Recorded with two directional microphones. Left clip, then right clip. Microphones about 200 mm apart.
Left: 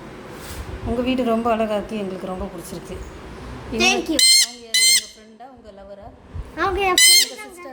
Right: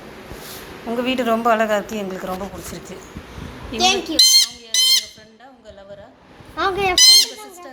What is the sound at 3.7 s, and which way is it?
Fowl, 15° left (ahead or behind).